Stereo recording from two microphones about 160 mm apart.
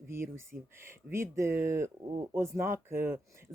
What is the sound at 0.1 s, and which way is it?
Speech, 15° right (ahead or behind).